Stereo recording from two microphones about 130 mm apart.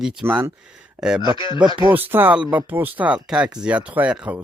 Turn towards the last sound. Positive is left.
turn(degrees=-10)  # may be behind; listen again after turning